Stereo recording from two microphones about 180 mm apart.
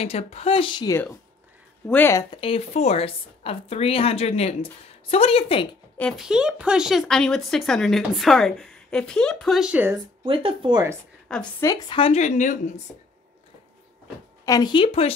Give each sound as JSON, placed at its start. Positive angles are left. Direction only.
{"t": 0.0, "sound": "a woman's voice", "side_deg": 35}
{"t": 1.9, "sound": "speech", "side_deg": 15}
{"t": 2.3, "sound": "a woman's voice", "side_deg": 30}
{"t": 5.9, "sound": "speech", "side_deg": 0}
{"t": 10.2, "sound": "speech", "side_deg": -30}
{"t": 11.3, "sound": "speech", "side_deg": 5}
{"t": 11.6, "sound": "speech", "side_deg": 15}
{"t": 12.0, "sound": "a woman's voice", "side_deg": 40}
{"t": 14.4, "sound": "speech", "side_deg": 20}